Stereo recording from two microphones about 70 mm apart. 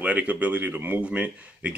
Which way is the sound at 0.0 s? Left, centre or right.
Centre.